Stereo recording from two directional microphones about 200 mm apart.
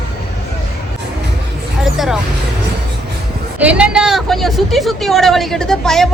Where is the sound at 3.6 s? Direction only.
5° right (ahead or behind).